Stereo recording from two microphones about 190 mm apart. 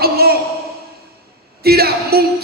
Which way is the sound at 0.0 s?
55° right (ahead or behind).